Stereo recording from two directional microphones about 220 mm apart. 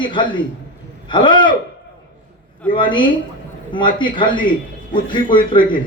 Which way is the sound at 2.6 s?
20° left (ahead or behind).